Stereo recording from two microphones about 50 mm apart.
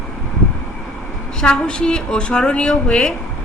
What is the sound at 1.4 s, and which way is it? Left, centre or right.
A woman's voice, centre.